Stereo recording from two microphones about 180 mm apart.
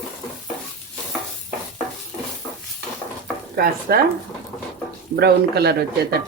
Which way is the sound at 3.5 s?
55° right (ahead or behind).